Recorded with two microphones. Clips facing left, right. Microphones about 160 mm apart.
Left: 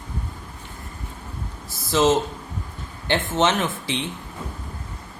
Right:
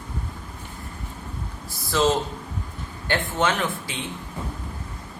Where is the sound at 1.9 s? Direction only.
20° left (ahead or behind).